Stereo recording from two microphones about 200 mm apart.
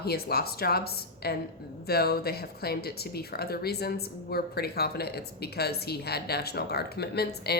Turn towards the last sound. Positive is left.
turn(degrees=55)  # may be behind; listen again after turning